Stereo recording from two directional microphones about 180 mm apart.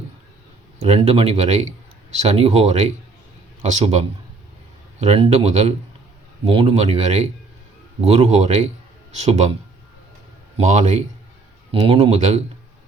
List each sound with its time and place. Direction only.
0.8 s speech: 35° right (ahead or behind)
10.6 s speech: 40° right (ahead or behind)